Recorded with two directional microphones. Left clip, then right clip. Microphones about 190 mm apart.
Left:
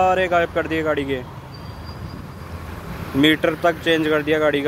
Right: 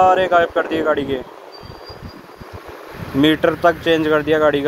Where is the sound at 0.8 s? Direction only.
30° left (ahead or behind).